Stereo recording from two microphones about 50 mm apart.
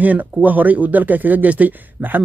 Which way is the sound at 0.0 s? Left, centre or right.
Right.